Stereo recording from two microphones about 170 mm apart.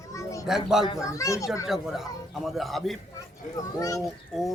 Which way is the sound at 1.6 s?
Centre (ahead or behind).